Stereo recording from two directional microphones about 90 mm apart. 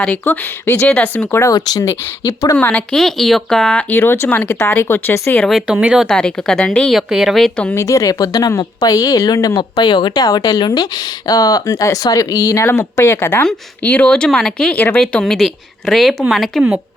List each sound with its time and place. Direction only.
0.0 s speech: 20° left (ahead or behind)
1.4 s speech: 45° left (ahead or behind)
2.6 s speech: 15° left (ahead or behind)
2.9 s speech: 5° left (ahead or behind); by 5.4 s 25° left (ahead or behind)
5.4 s a woman's voice: 5° right (ahead or behind)
6.1 s a woman's voice: 10° left (ahead or behind)
7.5 s speech: 15° left (ahead or behind)
7.8 s speech: 40° left (ahead or behind)
9.6 s speech: 55° left (ahead or behind)
10.2 s speech: 45° left (ahead or behind); by 13.4 s 30° left (ahead or behind)
13.4 s speech: 15° left (ahead or behind)
15.2 s a woman's voice: centre (ahead or behind)